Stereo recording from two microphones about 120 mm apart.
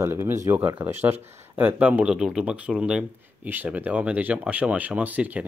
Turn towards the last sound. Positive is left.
turn(degrees=-10)  # may be behind; listen again after turning